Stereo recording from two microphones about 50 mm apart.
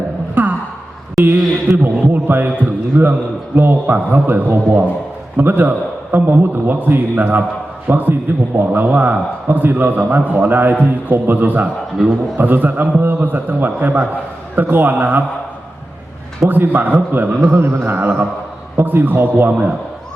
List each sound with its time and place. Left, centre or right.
0.4 s gasp: right
1.2 s a sound: right
3.0 s a man's voice: right
16.5 s a man's voice: right
17.5 s a man's voice: right